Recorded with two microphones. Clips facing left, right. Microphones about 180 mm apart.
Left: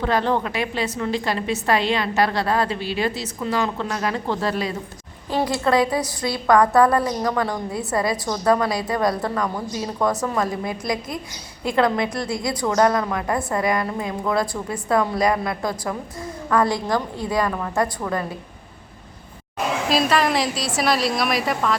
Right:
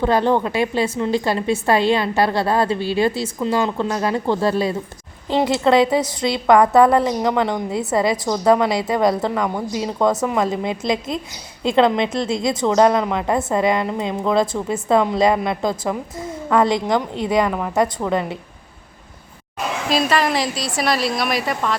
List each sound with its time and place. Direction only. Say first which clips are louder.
0.0 s a woman's voice: right 4 dB; 25° right (ahead or behind)
19.9 s a woman's voice: right 2 dB; centre (ahead or behind)